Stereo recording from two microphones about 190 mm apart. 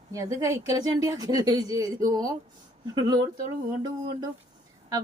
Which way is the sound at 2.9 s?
20° right (ahead or behind).